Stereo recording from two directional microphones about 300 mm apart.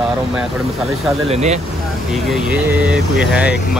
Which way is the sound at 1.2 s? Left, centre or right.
Right.